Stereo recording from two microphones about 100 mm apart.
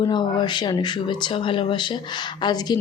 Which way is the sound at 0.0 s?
50° left (ahead or behind).